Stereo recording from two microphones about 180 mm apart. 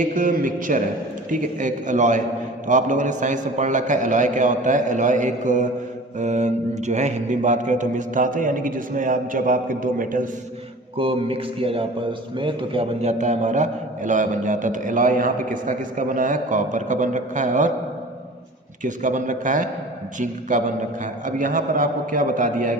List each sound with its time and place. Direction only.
0.0 s a man's voice: 50° right (ahead or behind)
10.9 s a man's voice: 30° right (ahead or behind)
18.8 s a man's voice: 45° right (ahead or behind)